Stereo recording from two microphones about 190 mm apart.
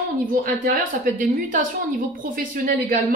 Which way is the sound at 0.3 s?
45° right (ahead or behind).